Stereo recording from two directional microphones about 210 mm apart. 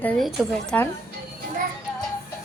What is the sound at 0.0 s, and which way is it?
Speech, 5° left (ahead or behind).